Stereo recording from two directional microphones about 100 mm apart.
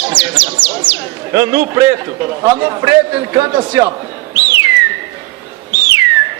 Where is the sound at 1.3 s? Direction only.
35° right (ahead or behind).